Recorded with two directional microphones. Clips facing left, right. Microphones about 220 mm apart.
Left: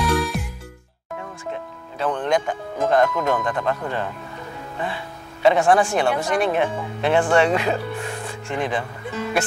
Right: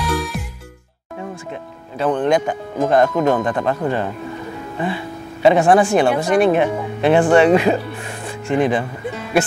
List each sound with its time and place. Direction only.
0.0 s music: centre (ahead or behind)
2.0 s speech: 10° right (ahead or behind)
3.2 s speech: 30° right (ahead or behind)
3.4 s speech: 15° right (ahead or behind)